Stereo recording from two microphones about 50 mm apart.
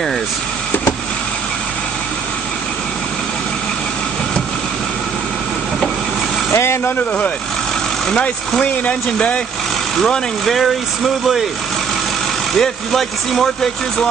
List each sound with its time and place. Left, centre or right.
6.5 s vehicle: left
8.1 s speech: centre
10.0 s speech: centre
12.5 s speech: centre